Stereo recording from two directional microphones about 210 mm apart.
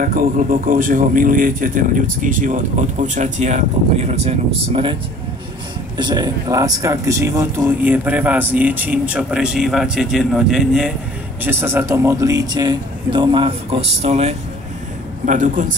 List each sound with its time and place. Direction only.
0.0 s speech: 40° right (ahead or behind); by 4.9 s 25° right (ahead or behind)
5.9 s speech: 20° right (ahead or behind); by 15.6 s 40° right (ahead or behind)